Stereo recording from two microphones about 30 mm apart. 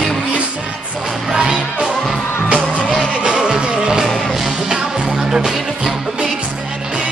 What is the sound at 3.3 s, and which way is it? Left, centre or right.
Music, right.